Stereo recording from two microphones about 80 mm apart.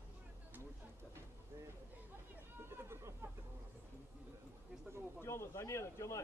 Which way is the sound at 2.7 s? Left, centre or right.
Right.